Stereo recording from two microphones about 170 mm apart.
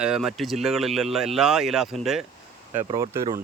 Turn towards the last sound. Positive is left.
turn(degrees=-20)  # may be behind; listen again after turning